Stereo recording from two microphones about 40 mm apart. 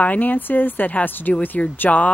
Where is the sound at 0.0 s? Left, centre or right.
Left.